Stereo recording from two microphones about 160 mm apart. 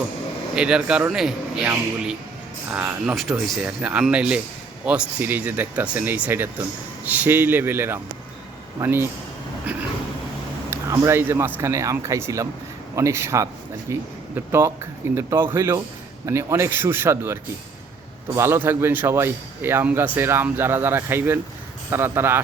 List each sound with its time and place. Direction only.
0.5 s a man's voice: 5° right (ahead or behind)
10.7 s speech: 20° right (ahead or behind)